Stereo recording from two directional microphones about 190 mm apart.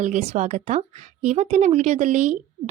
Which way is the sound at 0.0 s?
40° right (ahead or behind).